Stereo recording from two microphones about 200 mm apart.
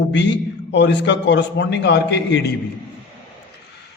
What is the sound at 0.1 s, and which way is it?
A man's voice, 60° left (ahead or behind).